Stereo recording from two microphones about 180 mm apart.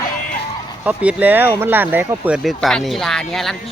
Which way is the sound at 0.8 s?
10° right (ahead or behind).